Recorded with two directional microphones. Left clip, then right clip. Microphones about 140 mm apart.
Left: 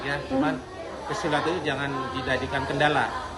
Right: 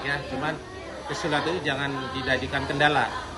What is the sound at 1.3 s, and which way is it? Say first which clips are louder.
Speech: even; 25° left (ahead or behind).